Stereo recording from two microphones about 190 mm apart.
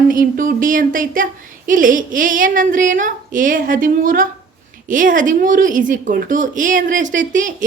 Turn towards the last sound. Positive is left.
turn(degrees=-40)  # may be behind; listen again after turning